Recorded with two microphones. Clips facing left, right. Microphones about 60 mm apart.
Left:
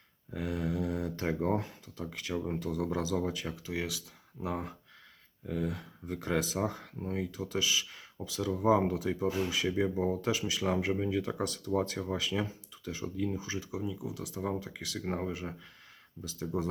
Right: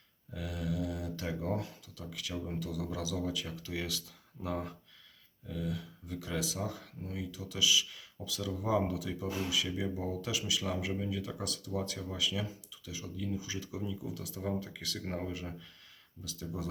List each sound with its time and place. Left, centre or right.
0.3 s speech: left
3.5 s speech: left
5.5 s speech: left
13.6 s speech: centre